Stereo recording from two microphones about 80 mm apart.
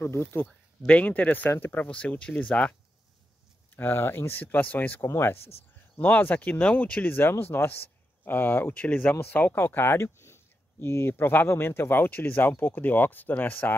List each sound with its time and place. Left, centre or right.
0.0 s speech: left; by 2.7 s centre
3.7 s speech: left